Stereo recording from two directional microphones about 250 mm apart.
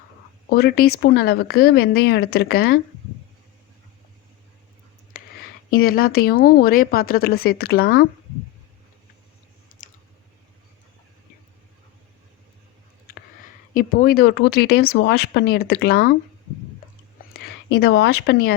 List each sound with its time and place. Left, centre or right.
0.5 s speech: left
5.1 s a sound: left
5.7 s speech: left
13.7 s speech: left
17.7 s speech: left